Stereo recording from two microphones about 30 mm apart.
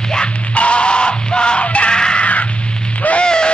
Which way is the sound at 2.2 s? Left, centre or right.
Left.